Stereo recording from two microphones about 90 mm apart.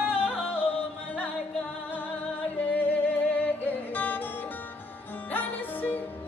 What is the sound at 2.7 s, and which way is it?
Music, 20° left (ahead or behind).